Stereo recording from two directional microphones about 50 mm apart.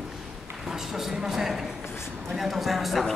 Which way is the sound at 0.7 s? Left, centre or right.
Centre.